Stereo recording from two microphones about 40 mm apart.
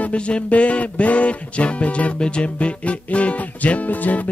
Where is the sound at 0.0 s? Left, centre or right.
Left.